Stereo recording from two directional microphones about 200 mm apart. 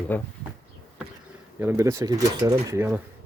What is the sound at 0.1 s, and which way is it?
Speech, 10° left (ahead or behind).